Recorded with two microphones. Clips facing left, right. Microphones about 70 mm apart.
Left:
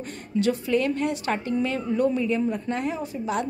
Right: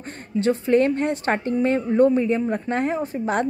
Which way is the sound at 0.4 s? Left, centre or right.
Right.